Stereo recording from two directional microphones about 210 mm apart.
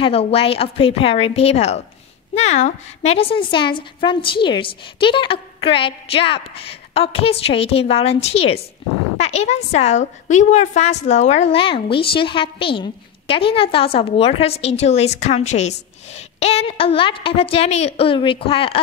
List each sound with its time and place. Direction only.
0.0 s a woman's voice: 30° left (ahead or behind)